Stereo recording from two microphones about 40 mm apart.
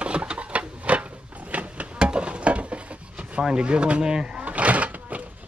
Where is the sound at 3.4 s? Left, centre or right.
Right.